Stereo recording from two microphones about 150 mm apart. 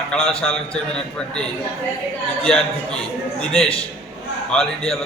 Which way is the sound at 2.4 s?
5° left (ahead or behind).